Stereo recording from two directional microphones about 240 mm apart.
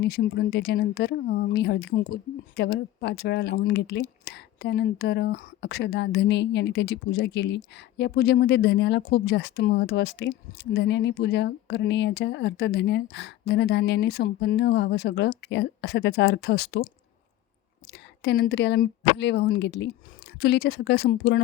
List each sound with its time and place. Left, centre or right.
0.0 s speech: left
17.9 s speech: left